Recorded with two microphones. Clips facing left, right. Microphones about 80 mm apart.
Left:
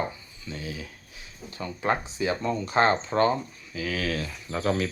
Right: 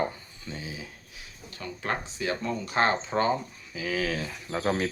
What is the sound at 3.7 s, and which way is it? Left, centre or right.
Speech, centre.